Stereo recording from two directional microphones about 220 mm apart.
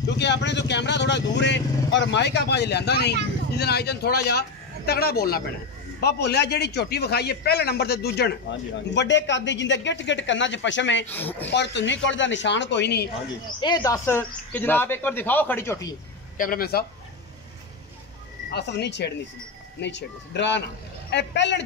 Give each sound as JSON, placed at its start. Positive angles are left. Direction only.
{"t": 0.2, "sound": "a man's voice", "side_deg": 50}
{"t": 11.1, "sound": "speech", "side_deg": 10}
{"t": 11.5, "sound": "a man's voice", "side_deg": 50}
{"t": 13.6, "sound": "speech", "side_deg": 20}
{"t": 16.3, "sound": "a man's voice", "side_deg": 40}
{"t": 18.5, "sound": "a man's voice", "side_deg": 50}